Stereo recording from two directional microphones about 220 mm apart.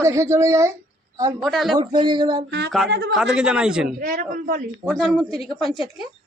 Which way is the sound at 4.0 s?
40° right (ahead or behind).